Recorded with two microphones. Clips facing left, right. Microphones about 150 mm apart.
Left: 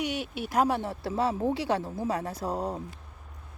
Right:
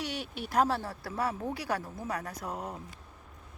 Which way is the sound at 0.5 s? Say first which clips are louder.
Left 2 dB; 10° left (ahead or behind).